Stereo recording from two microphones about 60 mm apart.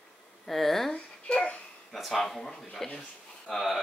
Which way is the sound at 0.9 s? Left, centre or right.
Left.